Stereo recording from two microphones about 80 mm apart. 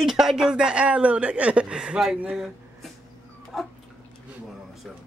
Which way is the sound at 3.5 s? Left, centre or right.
Centre.